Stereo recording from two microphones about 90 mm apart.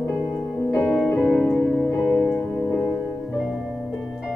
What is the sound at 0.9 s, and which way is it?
Music, centre (ahead or behind).